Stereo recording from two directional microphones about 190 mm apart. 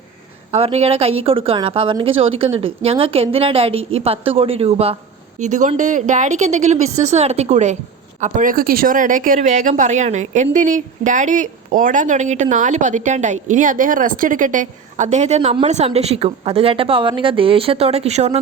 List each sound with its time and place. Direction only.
0.5 s a woman's voice: 35° right (ahead or behind)